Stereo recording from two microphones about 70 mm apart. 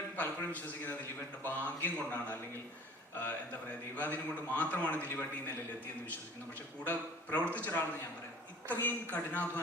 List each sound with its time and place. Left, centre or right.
0.2 s a man's voice: left
3.9 s a man's voice: left
6.8 s a man's voice: left